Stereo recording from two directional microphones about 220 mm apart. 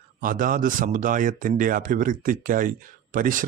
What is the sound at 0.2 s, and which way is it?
Speech, 40° right (ahead or behind).